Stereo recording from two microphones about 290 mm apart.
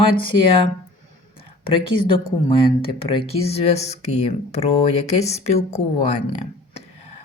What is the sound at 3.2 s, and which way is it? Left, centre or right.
Speech, left.